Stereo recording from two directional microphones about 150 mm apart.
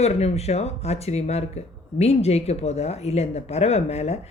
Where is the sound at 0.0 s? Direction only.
45° left (ahead or behind).